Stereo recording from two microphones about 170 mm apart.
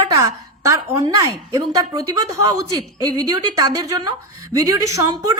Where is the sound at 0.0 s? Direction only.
20° right (ahead or behind).